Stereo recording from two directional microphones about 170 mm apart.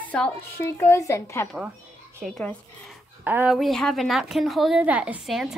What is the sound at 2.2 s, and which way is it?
Speech, 5° left (ahead or behind).